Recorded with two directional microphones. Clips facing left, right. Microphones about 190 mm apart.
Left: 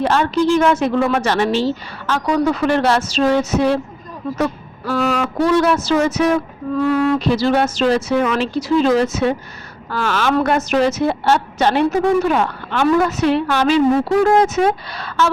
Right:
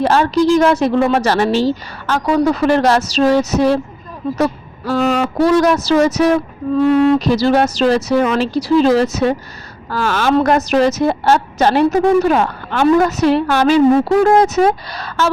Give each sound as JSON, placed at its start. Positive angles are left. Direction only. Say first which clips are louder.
{"t": 0.0, "sound": "a woman's voice", "louder": "right 3 dB", "side_deg": -35}
{"t": 4.4, "sound": "a sound", "louder": "right 3 dB", "side_deg": -40}
{"t": 4.9, "sound": "a woman's voice", "louder": "right 3 dB", "side_deg": -35}
{"t": 6.8, "sound": "speech", "louder": "right 5 dB", "side_deg": -25}
{"t": 7.3, "sound": "a woman's voice", "louder": "right 3 dB", "side_deg": -40}